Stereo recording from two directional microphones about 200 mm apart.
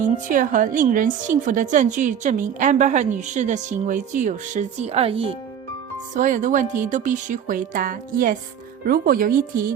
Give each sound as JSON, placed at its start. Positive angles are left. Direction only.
{"t": 0.0, "sound": "a woman's voice", "side_deg": -40}
{"t": 6.1, "sound": "a woman's voice", "side_deg": -40}